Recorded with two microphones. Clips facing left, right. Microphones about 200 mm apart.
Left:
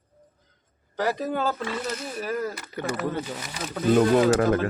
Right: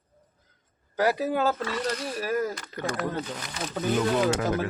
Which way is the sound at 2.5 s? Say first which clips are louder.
Left 1 dB; 5° left (ahead or behind).